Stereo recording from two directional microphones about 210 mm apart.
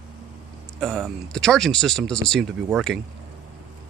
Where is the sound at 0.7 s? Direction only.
Centre (ahead or behind).